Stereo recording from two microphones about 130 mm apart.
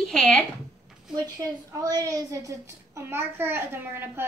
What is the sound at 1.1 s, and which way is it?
A woman's voice, 30° right (ahead or behind).